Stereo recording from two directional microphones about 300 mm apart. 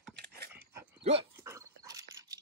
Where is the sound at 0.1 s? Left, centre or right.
Right.